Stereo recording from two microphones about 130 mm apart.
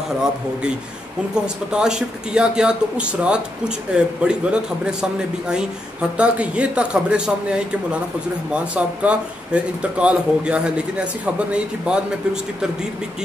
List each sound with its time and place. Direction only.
1.3 s speech: 5° right (ahead or behind)